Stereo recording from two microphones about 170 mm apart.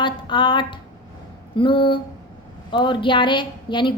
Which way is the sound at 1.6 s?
30° left (ahead or behind).